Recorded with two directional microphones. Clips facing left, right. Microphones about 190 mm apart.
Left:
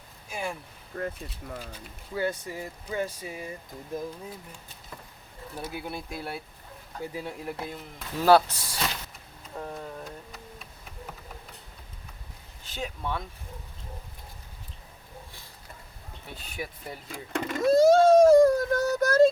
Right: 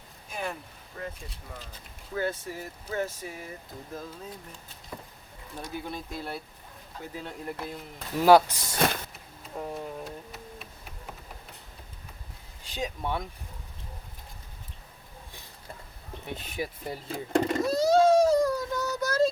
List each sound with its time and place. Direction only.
0.3 s a sound: 10° left (ahead or behind)
2.1 s speech: 15° left (ahead or behind)
5.5 s speech: 10° left (ahead or behind)
8.2 s speech: 15° right (ahead or behind)
8.7 s vehicle: 55° right (ahead or behind)
9.6 s speech: 10° right (ahead or behind)
12.7 s speech: 15° right (ahead or behind)
16.2 s speech: 20° right (ahead or behind)
17.7 s a sound: 50° left (ahead or behind)